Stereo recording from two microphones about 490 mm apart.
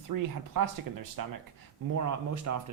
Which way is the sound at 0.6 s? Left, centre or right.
Right.